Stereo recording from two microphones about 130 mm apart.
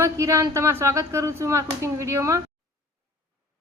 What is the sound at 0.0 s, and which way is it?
Speech, 25° right (ahead or behind).